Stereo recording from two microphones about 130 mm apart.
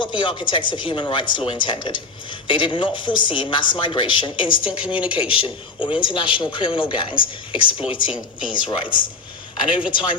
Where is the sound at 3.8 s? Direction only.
40° left (ahead or behind).